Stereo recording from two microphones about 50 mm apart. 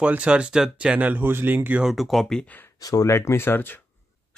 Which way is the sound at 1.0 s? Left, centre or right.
Right.